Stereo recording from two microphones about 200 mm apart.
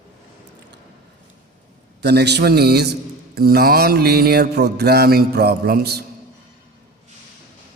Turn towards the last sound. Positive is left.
turn(degrees=-50)  # may be behind; listen again after turning